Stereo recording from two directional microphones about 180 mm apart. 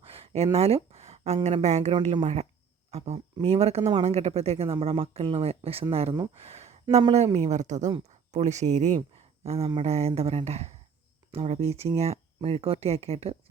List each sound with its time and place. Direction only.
0.0 s a sound: 30° right (ahead or behind)
1.5 s speech: 40° right (ahead or behind)
2.0 s speech: 25° right (ahead or behind)
2.2 s speech: 35° right (ahead or behind)